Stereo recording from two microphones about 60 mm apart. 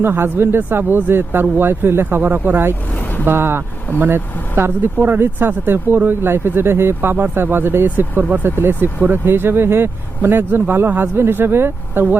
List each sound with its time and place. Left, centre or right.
0.0 s speech: right
2.9 s vehicle: left
3.2 s speech: right